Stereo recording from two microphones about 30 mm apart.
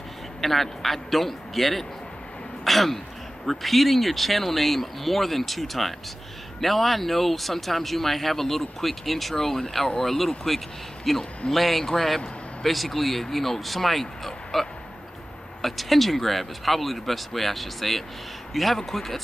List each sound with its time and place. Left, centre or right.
0.4 s a man's voice: centre
11.8 s a man's voice: centre
12.6 s a man's voice: centre